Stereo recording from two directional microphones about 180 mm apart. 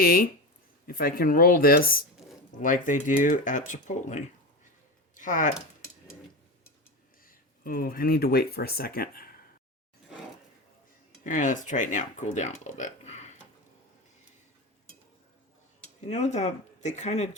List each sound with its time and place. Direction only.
0.0 s speech: 55° left (ahead or behind)
7.3 s speech: 50° left (ahead or behind)
11.2 s speech: 45° left (ahead or behind)
12.6 s a sound: 40° left (ahead or behind)
16.0 s speech: 40° left (ahead or behind)